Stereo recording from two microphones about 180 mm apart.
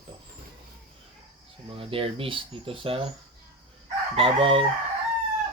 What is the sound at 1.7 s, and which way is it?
Speech, 30° right (ahead or behind).